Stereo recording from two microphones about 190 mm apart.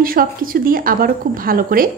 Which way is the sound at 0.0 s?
50° right (ahead or behind).